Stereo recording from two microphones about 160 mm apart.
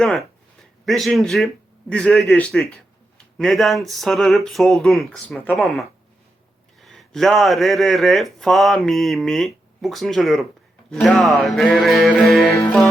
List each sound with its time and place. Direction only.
0.0 s speech: 5° left (ahead or behind)
6.8 s speech: centre (ahead or behind)